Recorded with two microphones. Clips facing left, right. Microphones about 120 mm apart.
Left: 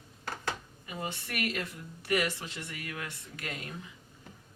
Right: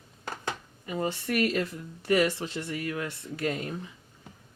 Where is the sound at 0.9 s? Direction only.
35° right (ahead or behind).